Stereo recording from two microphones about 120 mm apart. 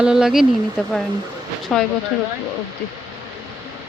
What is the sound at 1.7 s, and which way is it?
Speech, centre (ahead or behind).